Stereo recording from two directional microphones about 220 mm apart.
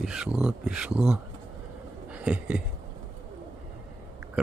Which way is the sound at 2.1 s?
5° right (ahead or behind).